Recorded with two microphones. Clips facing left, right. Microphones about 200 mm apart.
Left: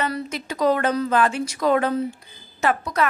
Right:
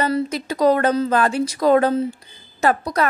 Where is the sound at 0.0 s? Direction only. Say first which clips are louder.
Right 6 dB; 35° right (ahead or behind).